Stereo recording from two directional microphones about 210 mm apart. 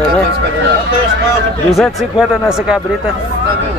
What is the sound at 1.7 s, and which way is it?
Speech, centre (ahead or behind).